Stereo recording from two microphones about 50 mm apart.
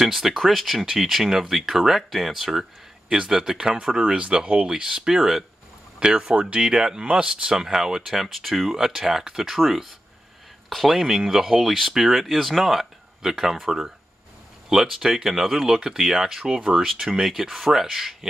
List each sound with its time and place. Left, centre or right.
0.0 s speech: centre